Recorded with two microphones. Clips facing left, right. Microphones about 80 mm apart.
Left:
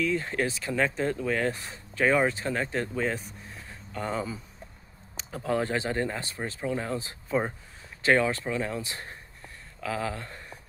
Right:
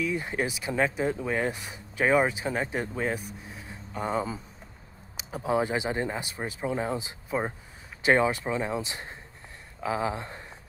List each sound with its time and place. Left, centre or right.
0.0 s speech: centre